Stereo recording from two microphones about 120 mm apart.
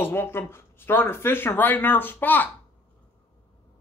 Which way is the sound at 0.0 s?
20° left (ahead or behind).